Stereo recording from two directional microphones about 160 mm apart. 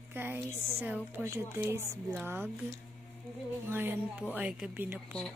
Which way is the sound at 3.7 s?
10° right (ahead or behind).